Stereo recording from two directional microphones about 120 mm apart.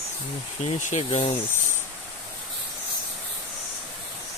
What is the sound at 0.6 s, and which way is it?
Speech, 80° left.